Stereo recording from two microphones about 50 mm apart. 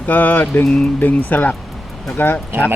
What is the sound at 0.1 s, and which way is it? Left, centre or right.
Mantra, left.